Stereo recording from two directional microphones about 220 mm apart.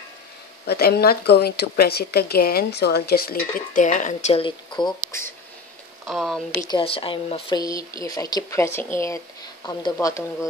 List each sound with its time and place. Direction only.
0.7 s a woman's voice: 45° left (ahead or behind); by 5.3 s 15° left (ahead or behind)
6.0 s speech: centre (ahead or behind)
6.7 s speech: 25° left (ahead or behind)